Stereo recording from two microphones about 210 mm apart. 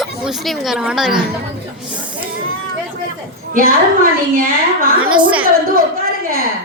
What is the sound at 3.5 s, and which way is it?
A woman's voice, 40° right (ahead or behind).